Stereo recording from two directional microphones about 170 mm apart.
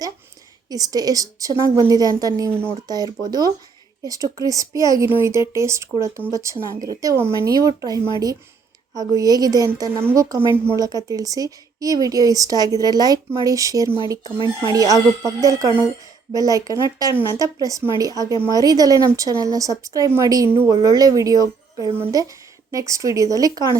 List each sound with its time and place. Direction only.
0.7 s speech: 20° right (ahead or behind)